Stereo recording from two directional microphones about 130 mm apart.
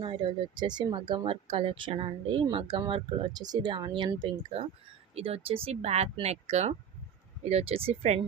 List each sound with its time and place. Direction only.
0.0 s speech: 40° right (ahead or behind)
5.1 s speech: 50° right (ahead or behind)